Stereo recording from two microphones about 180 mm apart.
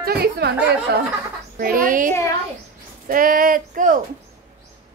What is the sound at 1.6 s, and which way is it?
Speech, 50° right (ahead or behind).